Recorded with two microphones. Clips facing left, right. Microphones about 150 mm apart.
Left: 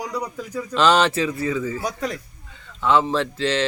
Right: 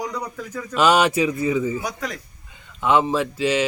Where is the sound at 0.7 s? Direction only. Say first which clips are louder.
Right 1 dB; 10° right (ahead or behind).